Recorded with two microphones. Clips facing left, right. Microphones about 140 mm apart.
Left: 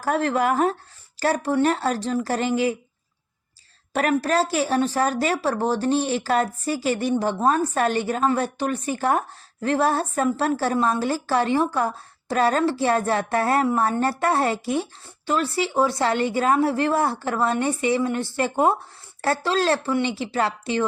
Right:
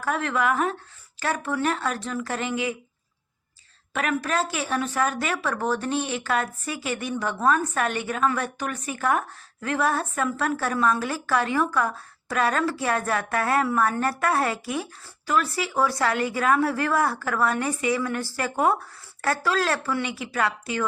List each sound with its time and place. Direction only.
0.0 s speech: 35° left (ahead or behind)
3.9 s speech: 35° left (ahead or behind)